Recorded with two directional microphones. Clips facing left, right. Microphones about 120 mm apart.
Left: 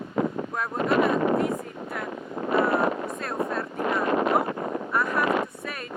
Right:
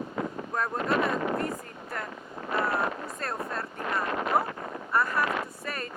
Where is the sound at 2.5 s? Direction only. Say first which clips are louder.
Left 6 dB; 55° left (ahead or behind).